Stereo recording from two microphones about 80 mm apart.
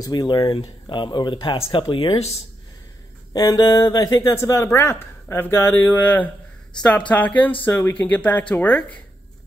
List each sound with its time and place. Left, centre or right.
0.0 s speech: left
3.3 s speech: left; by 8.9 s centre